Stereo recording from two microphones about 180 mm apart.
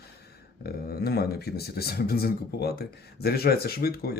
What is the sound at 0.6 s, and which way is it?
Speech, 60° left (ahead or behind).